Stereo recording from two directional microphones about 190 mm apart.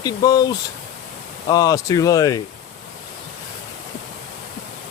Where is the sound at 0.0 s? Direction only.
20° left (ahead or behind).